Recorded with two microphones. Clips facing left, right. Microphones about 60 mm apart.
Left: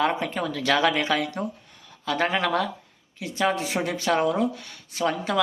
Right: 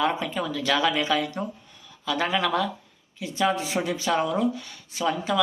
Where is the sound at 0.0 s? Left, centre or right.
Left.